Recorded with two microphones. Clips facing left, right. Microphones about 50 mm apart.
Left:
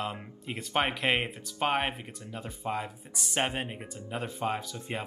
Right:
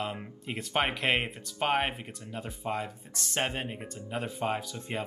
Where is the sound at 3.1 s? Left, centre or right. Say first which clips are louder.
Left 1 dB; centre.